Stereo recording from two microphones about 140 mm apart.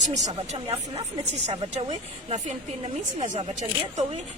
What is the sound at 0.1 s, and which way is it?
Speech, 55° right (ahead or behind).